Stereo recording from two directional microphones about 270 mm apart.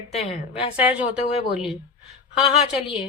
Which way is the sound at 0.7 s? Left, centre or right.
Centre.